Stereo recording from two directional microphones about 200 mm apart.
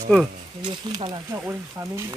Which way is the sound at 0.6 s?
20° right (ahead or behind).